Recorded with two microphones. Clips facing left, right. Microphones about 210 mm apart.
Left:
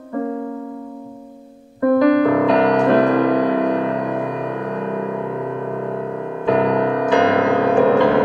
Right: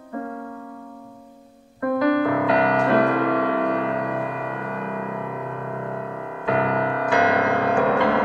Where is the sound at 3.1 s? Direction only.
35° left (ahead or behind).